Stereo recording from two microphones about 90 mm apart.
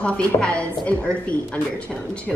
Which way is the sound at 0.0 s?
10° left (ahead or behind).